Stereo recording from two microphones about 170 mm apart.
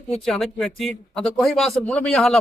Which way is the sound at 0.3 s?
Centre (ahead or behind).